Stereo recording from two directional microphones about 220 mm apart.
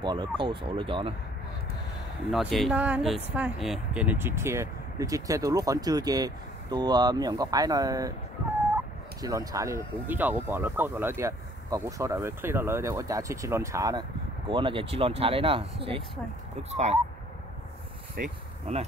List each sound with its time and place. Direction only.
0.0 s speech: 20° right (ahead or behind)
2.3 s speech: centre (ahead or behind); by 8.1 s 15° right (ahead or behind)
9.2 s speech: 15° right (ahead or behind)
18.1 s insect: 35° right (ahead or behind)